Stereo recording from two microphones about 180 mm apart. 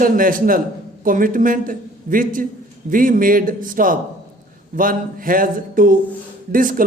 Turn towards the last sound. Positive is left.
turn(degrees=-50)  # may be behind; listen again after turning